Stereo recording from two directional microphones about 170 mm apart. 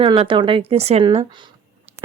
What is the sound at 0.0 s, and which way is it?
A woman's voice, 30° right (ahead or behind).